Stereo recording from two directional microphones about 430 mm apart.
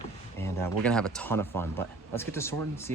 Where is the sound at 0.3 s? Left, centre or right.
Centre.